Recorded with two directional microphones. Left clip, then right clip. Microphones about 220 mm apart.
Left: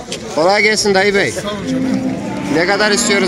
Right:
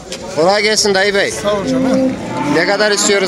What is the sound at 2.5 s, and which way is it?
Speech, 5° right (ahead or behind).